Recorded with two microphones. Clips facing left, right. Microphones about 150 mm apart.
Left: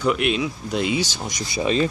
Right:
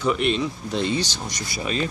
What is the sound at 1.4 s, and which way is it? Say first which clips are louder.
Speech: left 6 dB; 25° left (ahead or behind).